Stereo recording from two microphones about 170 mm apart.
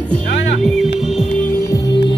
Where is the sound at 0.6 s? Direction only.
Centre (ahead or behind).